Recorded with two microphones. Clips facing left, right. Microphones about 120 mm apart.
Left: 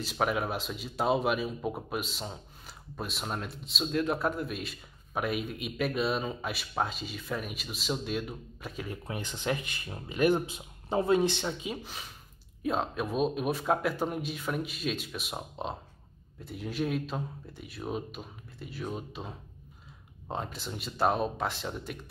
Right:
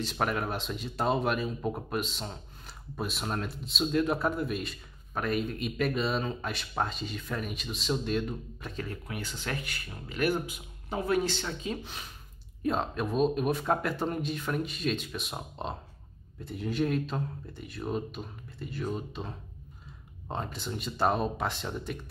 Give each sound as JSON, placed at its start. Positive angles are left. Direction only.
{"t": 0.0, "sound": "a man's voice", "side_deg": 5}
{"t": 9.0, "sound": "a man's voice", "side_deg": 20}